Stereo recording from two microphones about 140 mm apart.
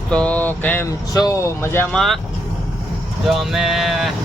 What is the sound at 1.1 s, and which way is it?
Speech, 25° left (ahead or behind).